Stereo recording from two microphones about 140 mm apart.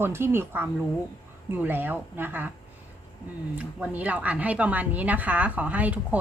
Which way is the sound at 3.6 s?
10° right (ahead or behind).